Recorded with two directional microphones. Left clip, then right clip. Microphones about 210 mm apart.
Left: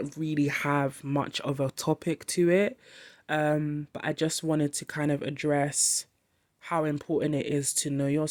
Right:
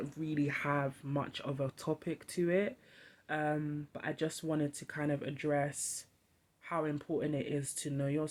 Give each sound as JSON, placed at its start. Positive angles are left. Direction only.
{"t": 0.0, "sound": "speech", "side_deg": 40}